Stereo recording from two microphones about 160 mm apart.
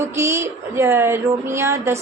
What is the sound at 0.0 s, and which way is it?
A woman's voice, 15° right (ahead or behind).